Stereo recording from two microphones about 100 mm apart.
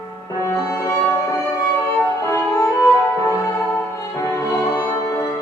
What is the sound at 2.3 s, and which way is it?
Music, 30° left (ahead or behind).